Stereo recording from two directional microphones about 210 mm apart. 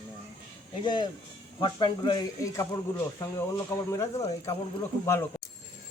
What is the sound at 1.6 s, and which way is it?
Speech, 20° left (ahead or behind).